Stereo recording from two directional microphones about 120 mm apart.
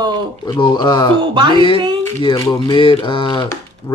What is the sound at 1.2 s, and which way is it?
Speech, 40° right (ahead or behind).